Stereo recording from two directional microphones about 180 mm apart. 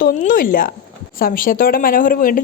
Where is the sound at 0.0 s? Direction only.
45° left (ahead or behind).